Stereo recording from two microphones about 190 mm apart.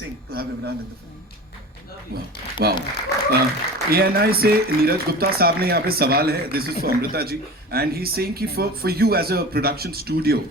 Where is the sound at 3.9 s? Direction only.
55° right (ahead or behind).